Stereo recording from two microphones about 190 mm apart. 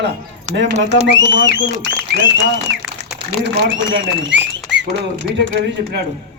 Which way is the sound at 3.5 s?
70° right (ahead or behind).